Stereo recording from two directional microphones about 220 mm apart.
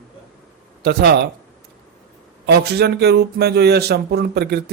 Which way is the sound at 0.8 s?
45° right (ahead or behind).